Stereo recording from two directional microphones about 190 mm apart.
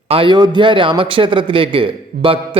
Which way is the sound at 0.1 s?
25° right (ahead or behind).